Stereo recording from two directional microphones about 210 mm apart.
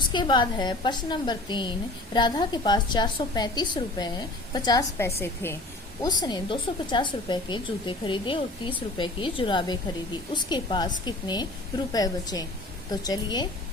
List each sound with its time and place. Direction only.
0.1 s a woman's voice: 20° left (ahead or behind)